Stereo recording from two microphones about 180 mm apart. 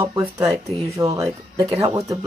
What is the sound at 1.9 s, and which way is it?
Speech, 20° right (ahead or behind).